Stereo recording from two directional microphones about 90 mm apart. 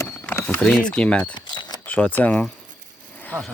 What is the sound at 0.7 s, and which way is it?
Speech, 10° left (ahead or behind).